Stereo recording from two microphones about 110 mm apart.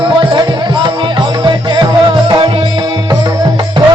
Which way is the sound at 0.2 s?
45° right (ahead or behind).